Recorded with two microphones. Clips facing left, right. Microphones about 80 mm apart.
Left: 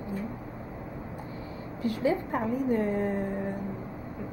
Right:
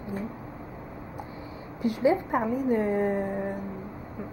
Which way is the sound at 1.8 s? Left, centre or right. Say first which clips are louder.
Right 4 dB; centre.